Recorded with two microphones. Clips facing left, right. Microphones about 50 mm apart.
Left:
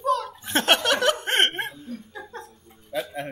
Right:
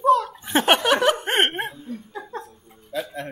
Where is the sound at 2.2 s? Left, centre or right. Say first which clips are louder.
Right 1 dB; centre.